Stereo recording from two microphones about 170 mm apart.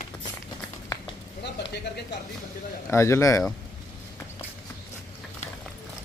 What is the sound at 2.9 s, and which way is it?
Speech, 15° left (ahead or behind).